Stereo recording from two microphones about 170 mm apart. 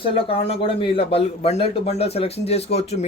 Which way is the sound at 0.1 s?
35° left (ahead or behind).